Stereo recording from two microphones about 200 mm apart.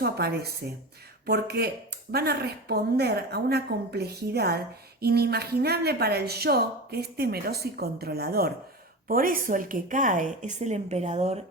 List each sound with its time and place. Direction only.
0.0 s a woman's voice: 50° right (ahead or behind); by 11.3 s 35° right (ahead or behind)